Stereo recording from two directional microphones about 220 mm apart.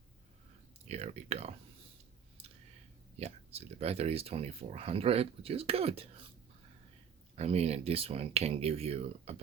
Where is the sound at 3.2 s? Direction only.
30° right (ahead or behind).